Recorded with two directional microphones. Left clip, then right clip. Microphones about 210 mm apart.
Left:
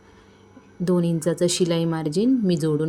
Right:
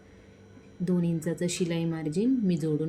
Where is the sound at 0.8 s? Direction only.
15° left (ahead or behind).